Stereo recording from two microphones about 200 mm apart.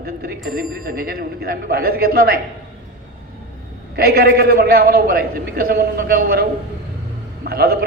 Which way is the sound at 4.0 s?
50° right (ahead or behind).